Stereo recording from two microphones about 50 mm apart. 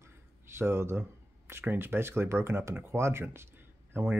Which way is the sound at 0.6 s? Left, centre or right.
Right.